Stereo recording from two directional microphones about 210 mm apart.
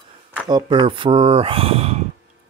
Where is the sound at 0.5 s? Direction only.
20° right (ahead or behind).